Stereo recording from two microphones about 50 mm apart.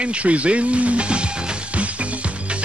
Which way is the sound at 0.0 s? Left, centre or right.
Right.